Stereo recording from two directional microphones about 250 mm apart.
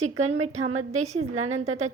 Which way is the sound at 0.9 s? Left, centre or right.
Right.